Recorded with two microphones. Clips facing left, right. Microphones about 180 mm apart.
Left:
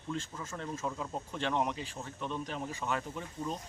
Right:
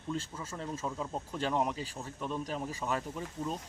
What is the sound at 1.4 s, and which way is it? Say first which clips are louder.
Speech: right 1 dB; 35° right (ahead or behind).